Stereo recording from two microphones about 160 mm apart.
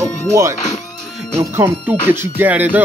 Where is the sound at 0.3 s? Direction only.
15° right (ahead or behind).